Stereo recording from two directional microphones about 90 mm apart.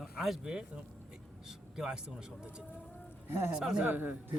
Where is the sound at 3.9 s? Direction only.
20° right (ahead or behind).